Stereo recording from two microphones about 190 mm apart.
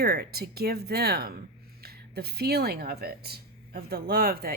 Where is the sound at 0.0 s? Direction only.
55° right (ahead or behind).